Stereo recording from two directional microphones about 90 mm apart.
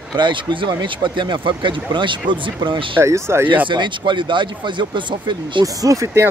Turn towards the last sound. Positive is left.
turn(degrees=-30)  # may be behind; listen again after turning